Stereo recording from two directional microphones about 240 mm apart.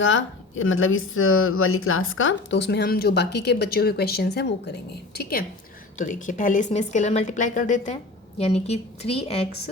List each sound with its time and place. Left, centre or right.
0.0 s a woman's voice: left